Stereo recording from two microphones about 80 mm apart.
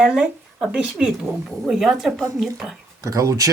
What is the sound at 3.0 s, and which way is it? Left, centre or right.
Speech, right.